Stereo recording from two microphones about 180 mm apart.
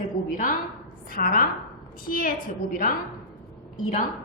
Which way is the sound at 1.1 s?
50° left (ahead or behind).